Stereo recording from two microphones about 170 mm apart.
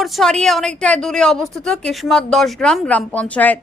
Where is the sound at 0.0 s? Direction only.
Centre (ahead or behind).